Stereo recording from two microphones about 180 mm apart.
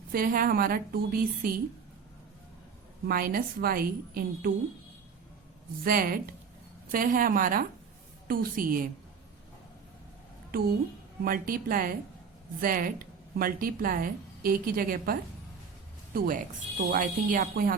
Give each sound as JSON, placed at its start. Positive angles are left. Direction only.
{"t": 0.1, "sound": "speech", "side_deg": -50}
{"t": 3.1, "sound": "a woman's voice", "side_deg": -55}
{"t": 5.8, "sound": "speech", "side_deg": -55}
{"t": 11.3, "sound": "speech", "side_deg": -50}